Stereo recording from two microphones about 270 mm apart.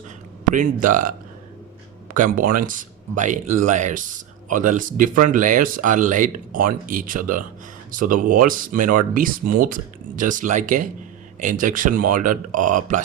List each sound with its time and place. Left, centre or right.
0.4 s speech: right
2.1 s speech: right